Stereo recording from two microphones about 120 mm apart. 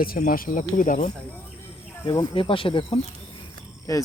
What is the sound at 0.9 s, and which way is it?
Speech, 90° left.